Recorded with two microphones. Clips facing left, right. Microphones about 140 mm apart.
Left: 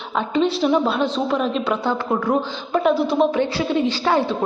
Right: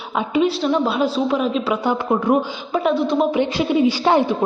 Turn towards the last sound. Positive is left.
turn(degrees=-15)  # may be behind; listen again after turning